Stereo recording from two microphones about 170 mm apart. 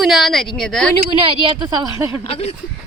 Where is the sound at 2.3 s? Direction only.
35° left (ahead or behind).